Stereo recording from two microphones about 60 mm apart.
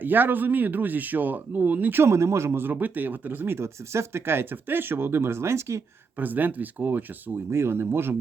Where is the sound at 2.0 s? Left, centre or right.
Right.